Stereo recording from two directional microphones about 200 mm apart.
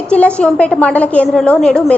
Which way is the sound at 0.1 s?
5° left (ahead or behind).